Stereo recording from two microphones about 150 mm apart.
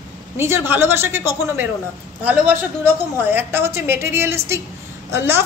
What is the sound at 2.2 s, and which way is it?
A woman's voice, 10° right (ahead or behind).